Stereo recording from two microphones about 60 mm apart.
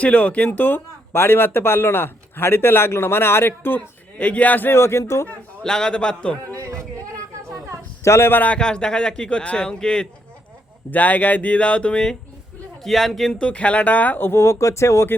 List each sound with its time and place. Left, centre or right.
0.0 s speech: left
4.7 s speech: left
5.6 s speech: centre
6.5 s a sound: right
8.0 s a man's voice: left
8.3 s speech: left
8.5 s speech: centre
10.9 s speech: left
12.8 s a man's voice: centre
13.4 s speech: left